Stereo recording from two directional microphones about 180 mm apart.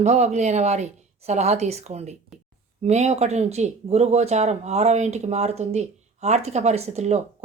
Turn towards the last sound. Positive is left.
turn(degrees=-40)  # may be behind; listen again after turning